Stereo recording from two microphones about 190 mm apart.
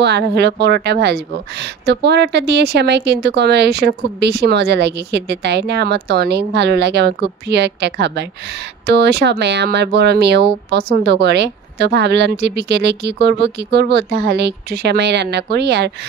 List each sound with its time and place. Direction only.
0.0 s a woman's voice: 65° right (ahead or behind)